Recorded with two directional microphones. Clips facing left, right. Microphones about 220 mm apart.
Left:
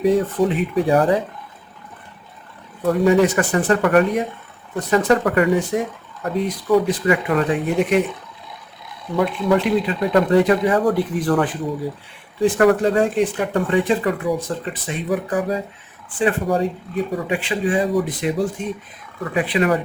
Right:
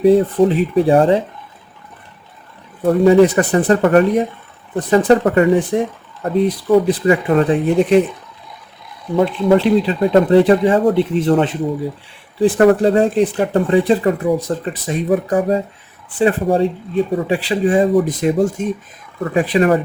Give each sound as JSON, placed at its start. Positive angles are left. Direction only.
{"t": 0.0, "sound": "speech", "side_deg": -30}
{"t": 2.8, "sound": "speech", "side_deg": -30}
{"t": 9.1, "sound": "speech", "side_deg": -30}
{"t": 14.4, "sound": "speech", "side_deg": -40}
{"t": 15.4, "sound": "speech", "side_deg": -25}